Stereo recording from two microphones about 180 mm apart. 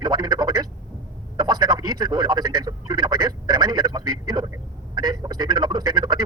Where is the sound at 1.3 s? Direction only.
20° right (ahead or behind).